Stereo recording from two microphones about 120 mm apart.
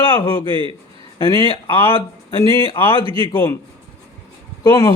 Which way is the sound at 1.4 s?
45° left (ahead or behind).